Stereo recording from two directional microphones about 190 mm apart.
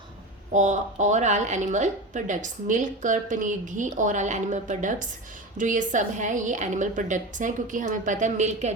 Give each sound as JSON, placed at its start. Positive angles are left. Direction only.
{"t": 0.5, "sound": "a woman's voice", "side_deg": -40}